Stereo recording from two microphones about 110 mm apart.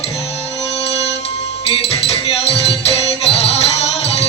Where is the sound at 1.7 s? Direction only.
65° left (ahead or behind).